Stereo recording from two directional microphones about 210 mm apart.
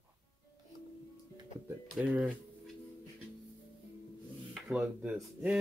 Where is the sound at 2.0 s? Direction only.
5° right (ahead or behind).